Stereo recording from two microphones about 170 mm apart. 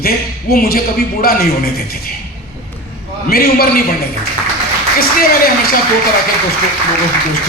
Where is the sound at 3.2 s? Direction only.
60° left (ahead or behind).